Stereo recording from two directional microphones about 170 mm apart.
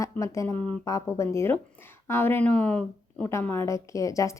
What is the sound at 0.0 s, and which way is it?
Speech, 20° left (ahead or behind).